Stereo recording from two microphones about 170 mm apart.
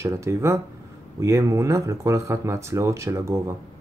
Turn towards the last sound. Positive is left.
turn(degrees=-15)  # may be behind; listen again after turning